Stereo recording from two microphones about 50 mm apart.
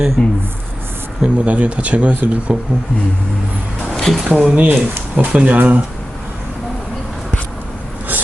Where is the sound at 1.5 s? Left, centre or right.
Right.